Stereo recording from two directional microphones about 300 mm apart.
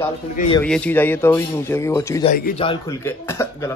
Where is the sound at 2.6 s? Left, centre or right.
Centre.